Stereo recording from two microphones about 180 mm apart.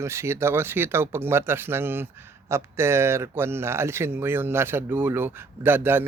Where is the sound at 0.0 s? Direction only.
15° right (ahead or behind).